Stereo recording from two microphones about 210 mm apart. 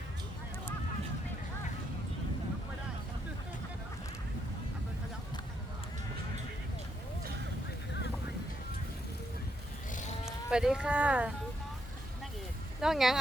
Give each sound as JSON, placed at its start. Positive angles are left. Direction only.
{"t": 9.9, "sound": "cattle", "side_deg": 35}
{"t": 10.5, "sound": "speech", "side_deg": -5}
{"t": 12.8, "sound": "speech", "side_deg": 0}